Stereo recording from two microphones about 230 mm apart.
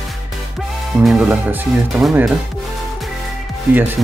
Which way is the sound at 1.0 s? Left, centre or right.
Centre.